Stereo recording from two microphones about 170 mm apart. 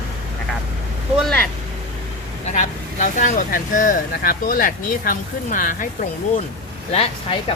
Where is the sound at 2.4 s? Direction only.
45° left (ahead or behind).